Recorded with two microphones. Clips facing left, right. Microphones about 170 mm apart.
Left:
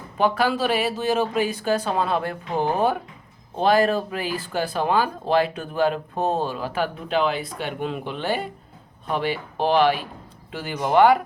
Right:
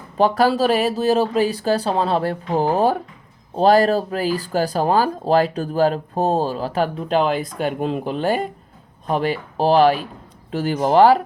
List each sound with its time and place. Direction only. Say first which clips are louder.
0.2 s speech: right 5 dB; 40° right (ahead or behind)